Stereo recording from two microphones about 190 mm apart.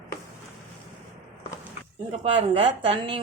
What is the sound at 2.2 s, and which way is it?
A woman's voice, 30° right (ahead or behind).